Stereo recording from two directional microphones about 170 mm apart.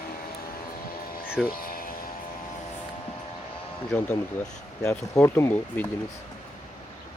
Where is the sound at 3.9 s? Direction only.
5° left (ahead or behind).